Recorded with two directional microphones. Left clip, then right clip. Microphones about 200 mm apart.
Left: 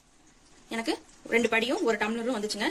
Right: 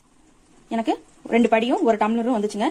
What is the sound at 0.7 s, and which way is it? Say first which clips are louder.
A woman's voice: right 8 dB; 30° right (ahead or behind).